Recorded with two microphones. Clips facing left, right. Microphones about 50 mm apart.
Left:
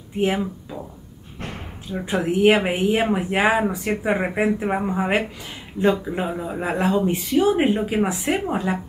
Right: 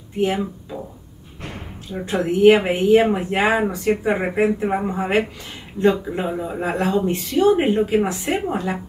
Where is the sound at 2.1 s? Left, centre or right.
Centre.